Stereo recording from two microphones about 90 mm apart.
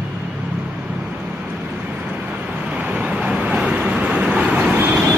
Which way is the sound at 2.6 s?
15° right (ahead or behind).